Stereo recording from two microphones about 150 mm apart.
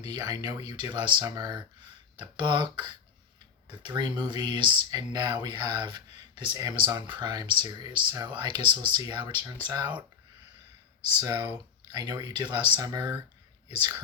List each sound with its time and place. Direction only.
0.0 s speech: 25° right (ahead or behind)
11.2 s speech: 25° right (ahead or behind)
11.4 s a sound: 15° right (ahead or behind)
11.9 s speech: 25° right (ahead or behind)